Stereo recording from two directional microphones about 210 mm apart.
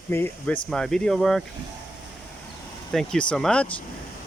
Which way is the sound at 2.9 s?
5° left (ahead or behind).